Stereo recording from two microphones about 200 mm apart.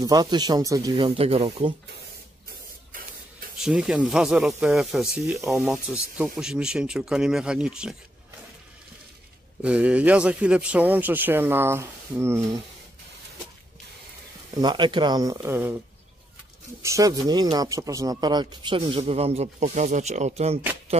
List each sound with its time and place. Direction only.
0.0 s speech: 20° right (ahead or behind)
2.9 s spray: 45° right (ahead or behind)
3.5 s speech: 5° right (ahead or behind)
5.3 s a man's voice: 15° right (ahead or behind)
5.6 s speech: centre (ahead or behind)
9.6 s a man's voice: 5° right (ahead or behind)
14.6 s speech: 20° right (ahead or behind)
16.8 s speech: 15° right (ahead or behind); by 20.6 s 30° right (ahead or behind)